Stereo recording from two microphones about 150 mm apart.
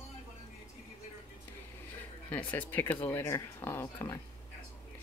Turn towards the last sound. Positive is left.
turn(degrees=15)  # may be behind; listen again after turning